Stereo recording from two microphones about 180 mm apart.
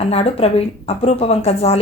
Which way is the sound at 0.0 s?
35° left (ahead or behind).